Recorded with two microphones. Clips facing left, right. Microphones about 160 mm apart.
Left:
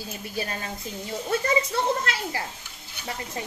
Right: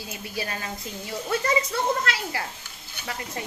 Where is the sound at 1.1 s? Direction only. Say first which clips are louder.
Even; 25° left (ahead or behind).